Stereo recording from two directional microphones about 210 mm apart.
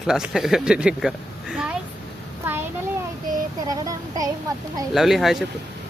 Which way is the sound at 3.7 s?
15° right (ahead or behind).